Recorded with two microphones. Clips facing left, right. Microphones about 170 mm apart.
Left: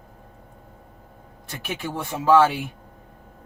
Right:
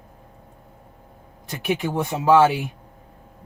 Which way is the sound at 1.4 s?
15° right (ahead or behind).